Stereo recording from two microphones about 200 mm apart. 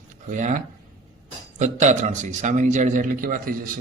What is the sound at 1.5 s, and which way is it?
A man's voice, 35° right (ahead or behind).